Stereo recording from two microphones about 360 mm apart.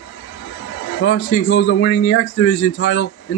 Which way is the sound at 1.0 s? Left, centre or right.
Left.